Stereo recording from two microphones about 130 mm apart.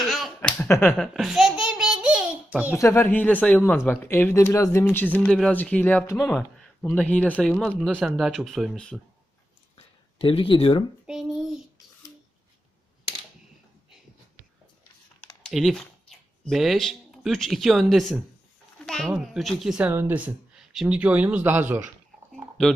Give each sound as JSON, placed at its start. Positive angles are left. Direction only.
{"t": 0.0, "sound": "finger snapping", "side_deg": 0}
{"t": 0.6, "sound": "speech", "side_deg": 20}
{"t": 0.9, "sound": "babbling", "side_deg": 0}
{"t": 2.7, "sound": "speech", "side_deg": 20}
{"t": 6.1, "sound": "speech", "side_deg": 0}
{"t": 6.8, "sound": "speech", "side_deg": 10}
{"t": 9.7, "sound": "a sound", "side_deg": 45}
{"t": 11.0, "sound": "a child's voice", "side_deg": 0}
{"t": 15.4, "sound": "speech", "side_deg": 0}